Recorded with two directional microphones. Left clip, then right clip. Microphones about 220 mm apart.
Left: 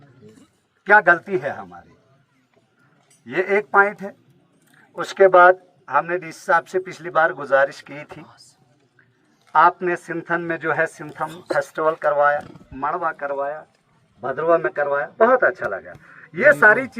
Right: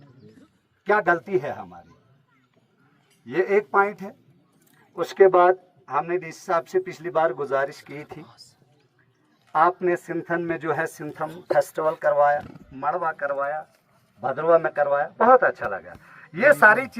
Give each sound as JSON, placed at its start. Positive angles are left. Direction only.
{"t": 0.9, "sound": "speech", "side_deg": 15}
{"t": 3.2, "sound": "speech", "side_deg": 15}
{"t": 4.9, "sound": "speech", "side_deg": 15}
{"t": 9.5, "sound": "speech", "side_deg": 5}
{"t": 13.1, "sound": "speech", "side_deg": -20}
{"t": 13.4, "sound": "a man's voice", "side_deg": -40}